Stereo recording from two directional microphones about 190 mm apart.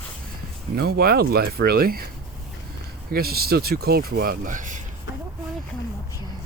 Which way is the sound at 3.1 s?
55° right (ahead or behind).